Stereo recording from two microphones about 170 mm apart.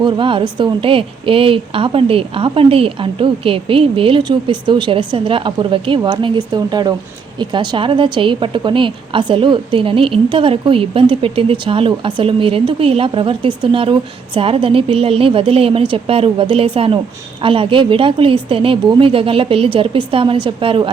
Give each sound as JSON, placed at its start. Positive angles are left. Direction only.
{"t": 0.0, "sound": "a woman's voice", "side_deg": -30}